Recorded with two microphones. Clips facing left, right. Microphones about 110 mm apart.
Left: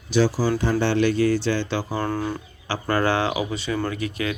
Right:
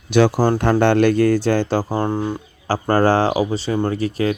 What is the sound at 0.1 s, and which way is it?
Speech, 60° right (ahead or behind).